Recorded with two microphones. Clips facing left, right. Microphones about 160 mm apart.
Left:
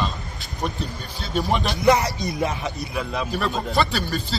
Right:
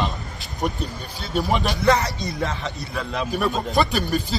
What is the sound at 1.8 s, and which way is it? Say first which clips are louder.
Speech: left 3 dB; 20° left (ahead or behind).